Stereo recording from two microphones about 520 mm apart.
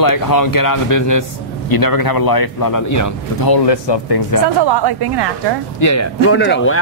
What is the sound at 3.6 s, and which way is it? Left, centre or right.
Speech, left.